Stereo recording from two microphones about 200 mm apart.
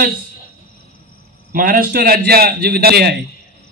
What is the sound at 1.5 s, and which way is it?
A man's voice, 45° right (ahead or behind).